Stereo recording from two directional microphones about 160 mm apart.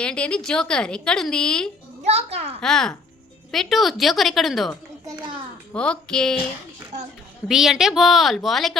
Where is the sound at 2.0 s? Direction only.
40° right (ahead or behind).